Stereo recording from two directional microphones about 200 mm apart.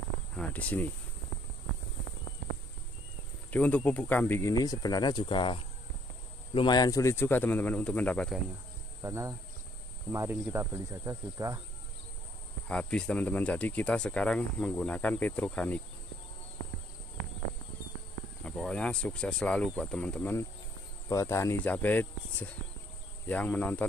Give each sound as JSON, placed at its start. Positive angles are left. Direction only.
{"t": 0.4, "sound": "speech", "side_deg": 5}
{"t": 3.5, "sound": "speech", "side_deg": 5}
{"t": 9.0, "sound": "cricket", "side_deg": -15}
{"t": 12.6, "sound": "speech", "side_deg": 5}
{"t": 18.4, "sound": "speech", "side_deg": 5}